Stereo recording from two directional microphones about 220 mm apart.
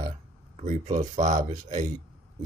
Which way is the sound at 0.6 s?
35° right (ahead or behind).